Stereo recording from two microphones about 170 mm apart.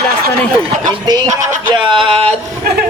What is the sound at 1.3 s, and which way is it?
Speech, 45° right (ahead or behind).